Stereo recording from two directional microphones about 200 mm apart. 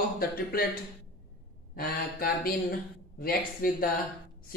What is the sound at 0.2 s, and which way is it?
Speech, 50° left (ahead or behind).